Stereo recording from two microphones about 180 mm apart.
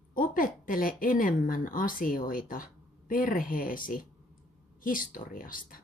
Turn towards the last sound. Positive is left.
turn(degrees=50)  # may be behind; listen again after turning